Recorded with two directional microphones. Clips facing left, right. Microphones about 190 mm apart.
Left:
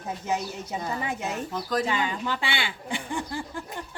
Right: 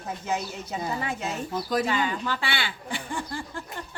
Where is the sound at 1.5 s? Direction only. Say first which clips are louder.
Right 2 dB; 10° right (ahead or behind).